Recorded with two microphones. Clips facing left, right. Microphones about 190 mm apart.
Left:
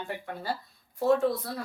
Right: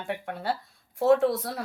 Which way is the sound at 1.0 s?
85° right.